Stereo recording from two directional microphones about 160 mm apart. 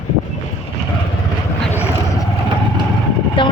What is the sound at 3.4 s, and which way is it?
Vehicle, 30° left (ahead or behind).